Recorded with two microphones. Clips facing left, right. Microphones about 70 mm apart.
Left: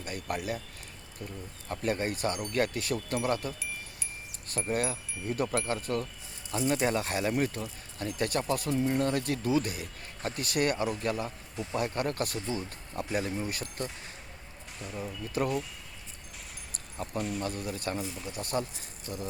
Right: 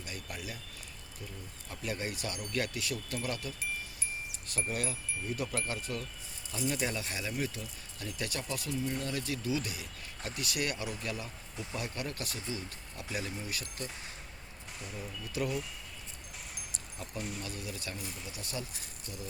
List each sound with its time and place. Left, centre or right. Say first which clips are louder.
0.0 s a man's voice: left 8 dB; left
1.6 s speech: left 7 dB; left
15.4 s speech: left 4 dB; left
17.0 s speech: left 8 dB; left